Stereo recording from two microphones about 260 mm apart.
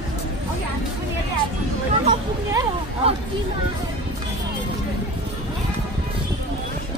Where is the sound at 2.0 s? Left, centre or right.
Centre.